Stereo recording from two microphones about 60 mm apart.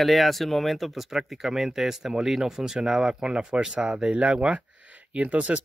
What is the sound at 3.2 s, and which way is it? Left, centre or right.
Speech, centre.